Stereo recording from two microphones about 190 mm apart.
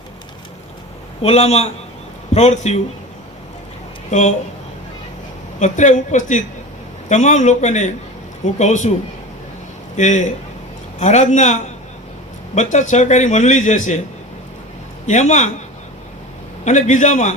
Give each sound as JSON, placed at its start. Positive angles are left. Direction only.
{"t": 1.2, "sound": "a man's voice", "side_deg": 35}
{"t": 4.1, "sound": "a man's voice", "side_deg": 35}
{"t": 5.5, "sound": "a man's voice", "side_deg": 40}
{"t": 10.0, "sound": "a man's voice", "side_deg": 40}
{"t": 15.0, "sound": "a man's voice", "side_deg": 40}
{"t": 16.6, "sound": "a man's voice", "side_deg": 40}